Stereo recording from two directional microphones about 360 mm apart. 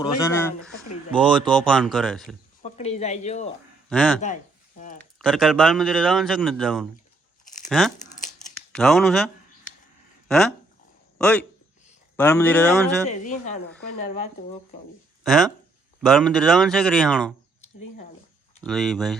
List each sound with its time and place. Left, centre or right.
0.0 s a man's voice: centre
2.6 s speech: centre
3.8 s speech: centre
4.8 s a woman's voice: left
5.2 s a man's voice: centre
7.4 s tearing: left
7.7 s a man's voice: centre
13.1 s a woman's voice: centre
15.2 s a man's voice: centre
18.6 s a man's voice: centre